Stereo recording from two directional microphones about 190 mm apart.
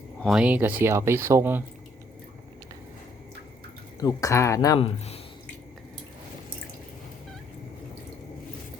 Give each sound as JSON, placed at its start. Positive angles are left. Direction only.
{"t": 0.2, "sound": "speech", "side_deg": 0}
{"t": 4.0, "sound": "speech", "side_deg": 15}
{"t": 4.8, "sound": "speech", "side_deg": 30}